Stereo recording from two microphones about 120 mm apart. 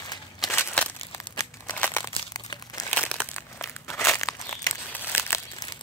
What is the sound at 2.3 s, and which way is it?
Crumpling, 30° left (ahead or behind).